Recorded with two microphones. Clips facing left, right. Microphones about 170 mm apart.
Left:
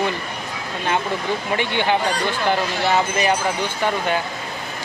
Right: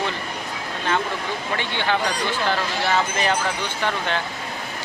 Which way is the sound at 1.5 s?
15° left (ahead or behind).